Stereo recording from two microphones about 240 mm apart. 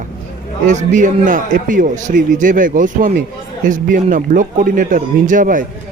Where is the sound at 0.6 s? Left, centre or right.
Right.